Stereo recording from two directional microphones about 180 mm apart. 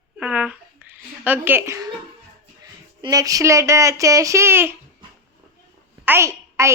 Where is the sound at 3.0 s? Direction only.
20° right (ahead or behind).